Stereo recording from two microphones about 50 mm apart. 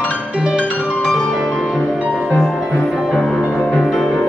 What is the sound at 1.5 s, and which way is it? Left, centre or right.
Music, centre.